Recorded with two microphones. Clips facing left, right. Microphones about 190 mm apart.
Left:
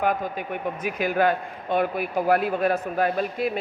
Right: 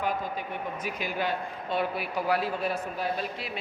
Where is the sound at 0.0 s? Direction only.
55° left (ahead or behind).